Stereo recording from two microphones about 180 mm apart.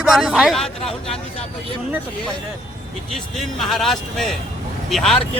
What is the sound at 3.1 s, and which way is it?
Speech, centre (ahead or behind).